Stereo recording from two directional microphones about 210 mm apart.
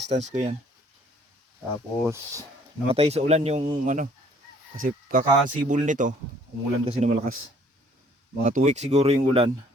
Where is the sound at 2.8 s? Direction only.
30° right (ahead or behind).